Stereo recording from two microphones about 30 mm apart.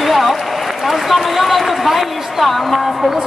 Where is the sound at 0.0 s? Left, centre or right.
Centre.